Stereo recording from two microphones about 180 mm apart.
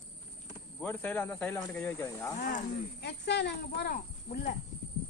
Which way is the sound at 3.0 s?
70° left (ahead or behind).